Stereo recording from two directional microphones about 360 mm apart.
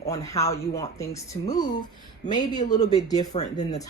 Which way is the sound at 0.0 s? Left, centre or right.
Centre.